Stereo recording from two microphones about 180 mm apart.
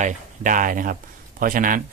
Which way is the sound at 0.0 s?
45° right (ahead or behind).